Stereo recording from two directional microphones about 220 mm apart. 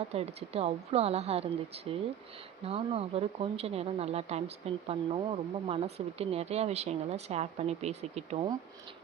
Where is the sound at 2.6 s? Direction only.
25° right (ahead or behind).